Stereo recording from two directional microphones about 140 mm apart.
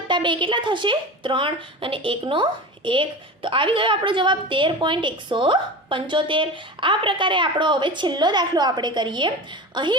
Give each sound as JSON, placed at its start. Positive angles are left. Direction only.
{"t": 0.1, "sound": "a woman's voice", "side_deg": -35}